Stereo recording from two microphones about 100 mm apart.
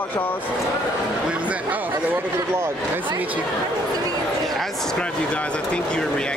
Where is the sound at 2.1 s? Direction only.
25° right (ahead or behind).